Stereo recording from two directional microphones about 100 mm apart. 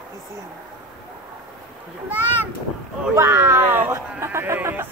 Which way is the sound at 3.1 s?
25° right (ahead or behind).